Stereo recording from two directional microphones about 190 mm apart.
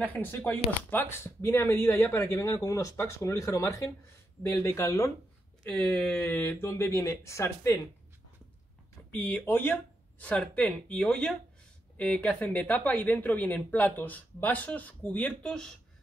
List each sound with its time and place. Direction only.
0.0 s speech: 10° left (ahead or behind)
9.1 s speech: 10° left (ahead or behind)